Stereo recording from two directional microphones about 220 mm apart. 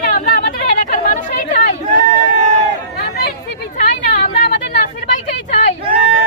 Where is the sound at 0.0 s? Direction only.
35° left (ahead or behind).